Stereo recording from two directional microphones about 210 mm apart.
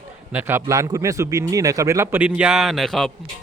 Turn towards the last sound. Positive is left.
turn(degrees=0)  # may be behind; listen again after turning